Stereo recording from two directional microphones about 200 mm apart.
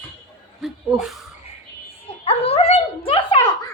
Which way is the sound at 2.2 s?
30° left (ahead or behind).